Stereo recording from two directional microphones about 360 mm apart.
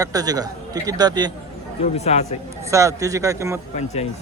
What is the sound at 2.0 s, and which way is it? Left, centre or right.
Speech, centre.